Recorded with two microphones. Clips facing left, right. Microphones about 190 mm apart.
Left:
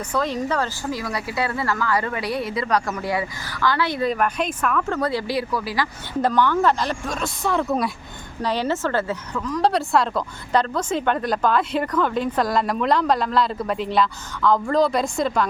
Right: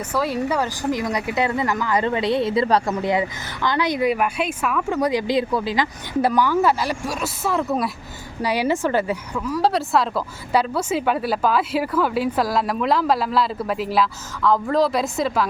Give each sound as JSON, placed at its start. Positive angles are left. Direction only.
{"t": 0.1, "sound": "speech", "side_deg": -10}